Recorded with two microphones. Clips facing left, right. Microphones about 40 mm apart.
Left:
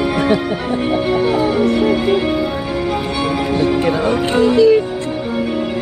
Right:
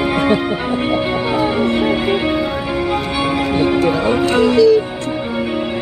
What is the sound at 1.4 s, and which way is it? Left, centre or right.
Music, right.